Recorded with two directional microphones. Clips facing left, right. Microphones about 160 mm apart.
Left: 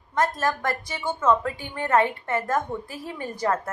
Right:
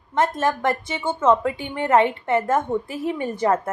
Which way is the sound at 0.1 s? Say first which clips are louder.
Right 3 dB; 25° right (ahead or behind).